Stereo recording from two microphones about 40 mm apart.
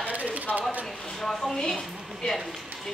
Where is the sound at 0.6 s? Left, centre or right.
Right.